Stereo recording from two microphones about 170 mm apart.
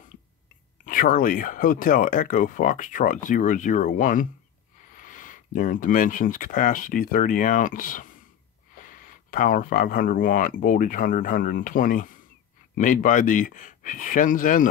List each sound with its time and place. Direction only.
0.8 s speech: 55° left (ahead or behind)